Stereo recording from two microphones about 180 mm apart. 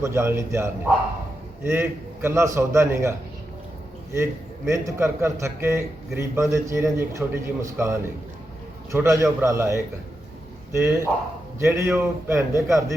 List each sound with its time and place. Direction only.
0.0 s a man's voice: 15° right (ahead or behind)